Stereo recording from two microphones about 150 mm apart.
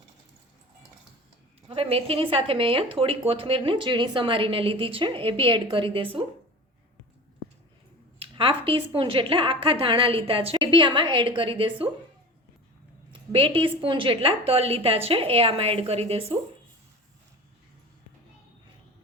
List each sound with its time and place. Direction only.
1.6 s a woman's voice: 40° right (ahead or behind)
8.2 s a woman's voice: 35° right (ahead or behind)
13.1 s a woman's voice: 35° right (ahead or behind)